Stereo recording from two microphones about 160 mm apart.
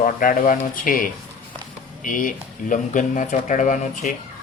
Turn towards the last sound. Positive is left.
turn(degrees=50)  # may be behind; listen again after turning